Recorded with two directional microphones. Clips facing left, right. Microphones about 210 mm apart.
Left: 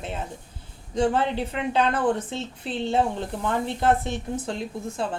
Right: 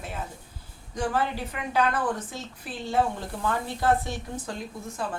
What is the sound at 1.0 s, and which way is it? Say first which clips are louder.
A woman's voice: left 5 dB; 25° left (ahead or behind).